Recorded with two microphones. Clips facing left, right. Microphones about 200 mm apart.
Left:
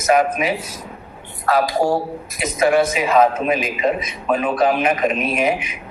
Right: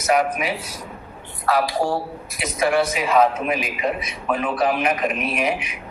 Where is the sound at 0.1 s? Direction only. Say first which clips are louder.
Left 3 dB; 20° left (ahead or behind).